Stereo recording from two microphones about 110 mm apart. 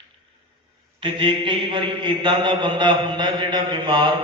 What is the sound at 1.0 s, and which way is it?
A man's voice, 50° right (ahead or behind).